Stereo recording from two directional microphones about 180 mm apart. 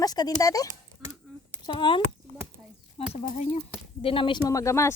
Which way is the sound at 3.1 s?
40° left (ahead or behind).